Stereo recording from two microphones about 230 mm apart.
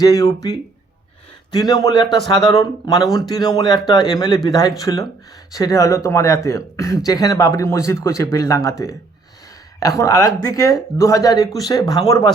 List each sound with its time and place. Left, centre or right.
0.0 s speech: centre
1.5 s speech: centre
10.0 s speech: centre